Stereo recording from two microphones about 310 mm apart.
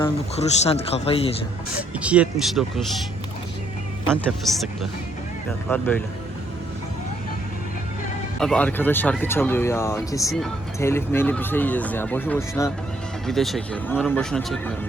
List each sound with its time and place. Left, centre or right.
0.0 s speech: centre
2.0 s speech: centre
4.1 s speech: centre
8.4 s speech: centre